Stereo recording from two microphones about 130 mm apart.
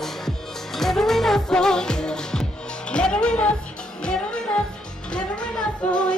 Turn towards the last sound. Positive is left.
turn(degrees=5)  # may be behind; listen again after turning